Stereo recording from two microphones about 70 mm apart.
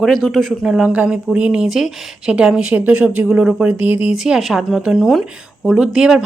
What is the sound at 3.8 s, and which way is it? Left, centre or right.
Speech, right.